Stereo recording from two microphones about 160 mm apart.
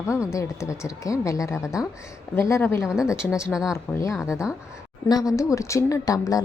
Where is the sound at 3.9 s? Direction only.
20° left (ahead or behind).